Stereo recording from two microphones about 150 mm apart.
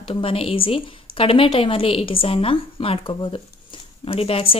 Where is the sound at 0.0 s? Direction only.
40° left (ahead or behind).